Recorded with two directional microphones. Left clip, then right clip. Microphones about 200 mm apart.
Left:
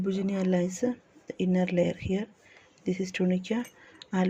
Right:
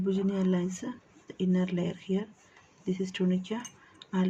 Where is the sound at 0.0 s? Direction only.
25° left (ahead or behind).